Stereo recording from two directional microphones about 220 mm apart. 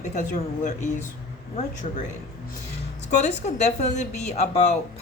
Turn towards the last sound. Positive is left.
turn(degrees=30)  # may be behind; listen again after turning